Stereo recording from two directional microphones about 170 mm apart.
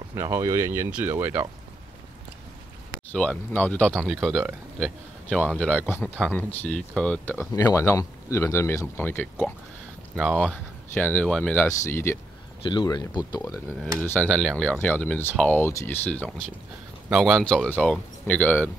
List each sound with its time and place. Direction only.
0.1 s speech: 15° right (ahead or behind)
3.1 s speech: 10° left (ahead or behind)
12.6 s speech: 25° left (ahead or behind)
14.0 s speech: 10° left (ahead or behind)